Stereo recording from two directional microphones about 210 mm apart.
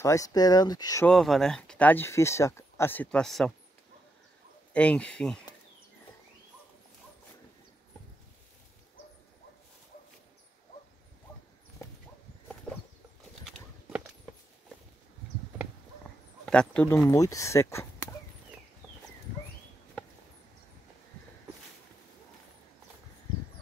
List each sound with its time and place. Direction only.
0.0 s speech: 15° left (ahead or behind)
1.0 s speech: centre (ahead or behind)
4.7 s speech: 5° left (ahead or behind)
11.8 s dog: 15° left (ahead or behind)
16.4 s speech: 5° left (ahead or behind)